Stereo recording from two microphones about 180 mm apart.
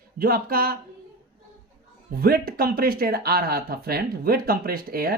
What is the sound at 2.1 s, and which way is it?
Speech, 55° right (ahead or behind).